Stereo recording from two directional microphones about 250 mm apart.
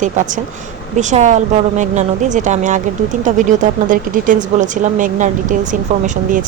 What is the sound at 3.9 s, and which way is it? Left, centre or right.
A woman's voice, right.